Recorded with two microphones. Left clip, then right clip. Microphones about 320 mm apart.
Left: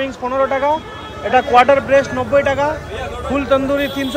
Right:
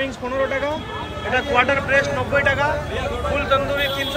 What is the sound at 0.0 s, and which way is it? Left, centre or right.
Speech, left.